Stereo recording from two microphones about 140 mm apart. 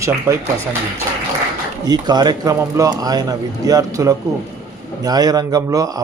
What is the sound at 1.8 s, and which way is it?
Speech, 30° right (ahead or behind).